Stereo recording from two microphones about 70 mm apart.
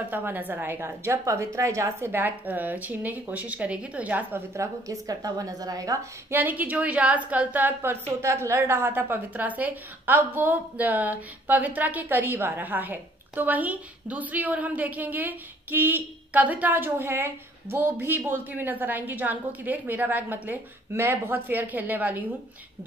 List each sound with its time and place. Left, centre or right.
0.1 s a woman's voice: right
2.0 s a woman's voice: right
4.6 s speech: right
6.3 s a woman's voice: right
8.1 s a woman's voice: right